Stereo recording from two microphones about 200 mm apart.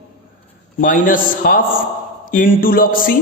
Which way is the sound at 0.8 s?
40° left (ahead or behind).